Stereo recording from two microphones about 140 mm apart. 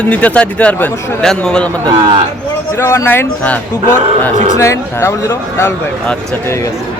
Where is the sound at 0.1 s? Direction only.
10° left (ahead or behind).